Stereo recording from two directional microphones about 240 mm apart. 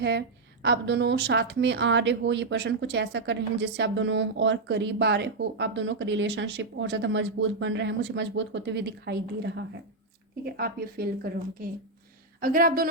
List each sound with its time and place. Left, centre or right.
0.0 s a woman's voice: right